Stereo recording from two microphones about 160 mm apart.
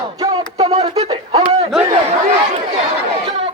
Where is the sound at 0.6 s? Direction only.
40° right (ahead or behind).